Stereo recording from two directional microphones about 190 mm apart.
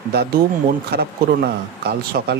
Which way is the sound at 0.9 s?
55° right (ahead or behind).